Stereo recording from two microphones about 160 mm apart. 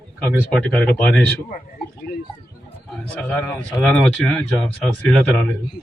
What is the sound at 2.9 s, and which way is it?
Speech, 10° left (ahead or behind).